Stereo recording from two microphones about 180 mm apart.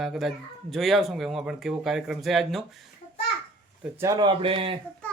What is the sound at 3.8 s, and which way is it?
Speech, 15° right (ahead or behind).